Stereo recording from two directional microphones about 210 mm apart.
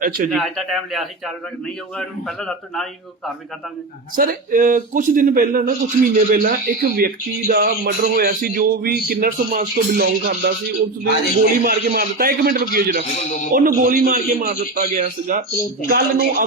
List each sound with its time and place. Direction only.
0.0 s a man's voice: 40° right (ahead or behind)
0.3 s a man's voice: centre (ahead or behind)
4.1 s a man's voice: 40° right (ahead or behind)
13.1 s a man's voice: 35° left (ahead or behind)
13.5 s a man's voice: 40° right (ahead or behind)